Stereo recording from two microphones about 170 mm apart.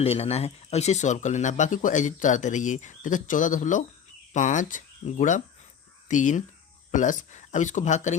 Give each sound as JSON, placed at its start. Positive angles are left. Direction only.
{"t": 0.0, "sound": "speech", "side_deg": 35}